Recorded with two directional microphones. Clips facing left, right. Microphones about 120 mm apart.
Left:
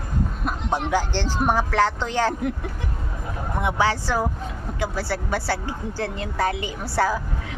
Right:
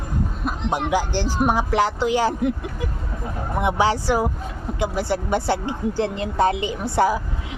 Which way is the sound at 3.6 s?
15° right (ahead or behind).